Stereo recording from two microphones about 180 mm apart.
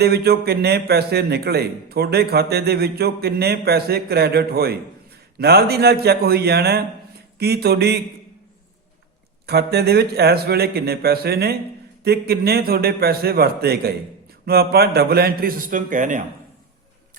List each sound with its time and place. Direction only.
0.0 s speech: 60° right (ahead or behind)
9.5 s speech: 65° right (ahead or behind); by 16.2 s 45° right (ahead or behind)